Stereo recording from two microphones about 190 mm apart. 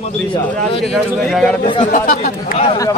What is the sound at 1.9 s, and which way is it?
Speech, 45° left (ahead or behind).